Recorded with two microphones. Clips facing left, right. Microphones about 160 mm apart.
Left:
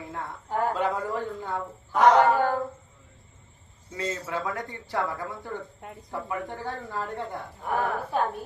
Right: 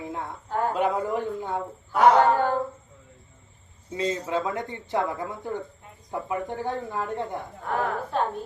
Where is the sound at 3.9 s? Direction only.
15° right (ahead or behind).